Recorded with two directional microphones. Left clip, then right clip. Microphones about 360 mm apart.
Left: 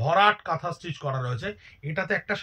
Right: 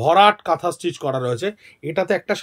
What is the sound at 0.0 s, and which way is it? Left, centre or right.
Speech, right.